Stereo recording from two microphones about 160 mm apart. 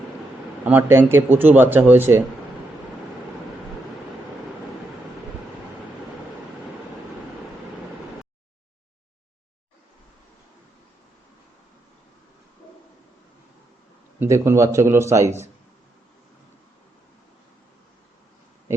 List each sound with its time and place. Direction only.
0.6 s speech: 10° right (ahead or behind)
14.2 s speech: 15° right (ahead or behind)